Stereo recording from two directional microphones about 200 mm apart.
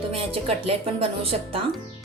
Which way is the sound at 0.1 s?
30° right (ahead or behind).